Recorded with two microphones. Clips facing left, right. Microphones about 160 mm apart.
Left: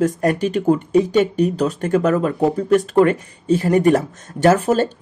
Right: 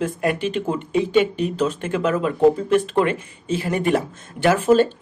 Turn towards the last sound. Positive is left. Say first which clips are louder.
# left 1 dB
turn(degrees=40)  # may be behind; listen again after turning